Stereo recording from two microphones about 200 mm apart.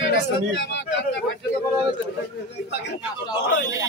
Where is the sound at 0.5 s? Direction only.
65° left (ahead or behind).